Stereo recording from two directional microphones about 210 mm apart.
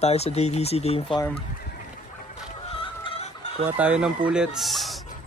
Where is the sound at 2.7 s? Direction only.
25° left (ahead or behind).